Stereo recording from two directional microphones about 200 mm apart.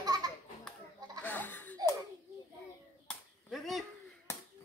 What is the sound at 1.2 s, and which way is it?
Laughter, 10° left (ahead or behind).